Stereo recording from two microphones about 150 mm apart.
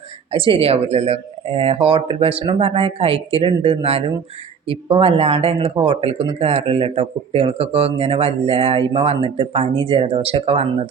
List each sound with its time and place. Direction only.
0.3 s a man's voice: 35° right (ahead or behind)